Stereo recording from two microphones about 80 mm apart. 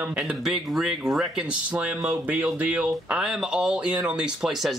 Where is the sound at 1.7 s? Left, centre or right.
Centre.